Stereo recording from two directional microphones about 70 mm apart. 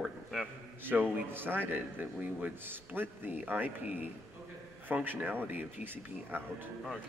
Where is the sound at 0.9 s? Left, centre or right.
Centre.